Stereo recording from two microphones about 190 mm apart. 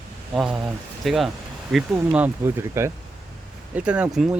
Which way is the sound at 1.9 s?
10° right (ahead or behind).